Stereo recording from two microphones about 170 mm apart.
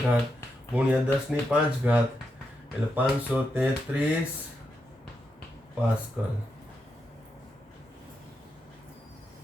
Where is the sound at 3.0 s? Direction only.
10° right (ahead or behind).